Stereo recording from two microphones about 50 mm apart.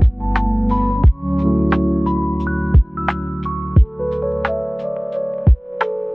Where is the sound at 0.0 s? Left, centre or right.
Centre.